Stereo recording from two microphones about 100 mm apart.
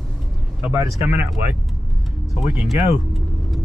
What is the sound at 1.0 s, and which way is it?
Speech, 15° right (ahead or behind).